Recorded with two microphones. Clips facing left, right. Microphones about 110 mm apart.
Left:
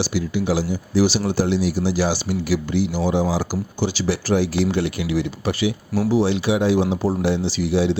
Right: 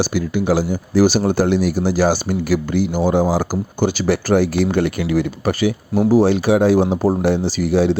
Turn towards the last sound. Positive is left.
turn(degrees=-50)  # may be behind; listen again after turning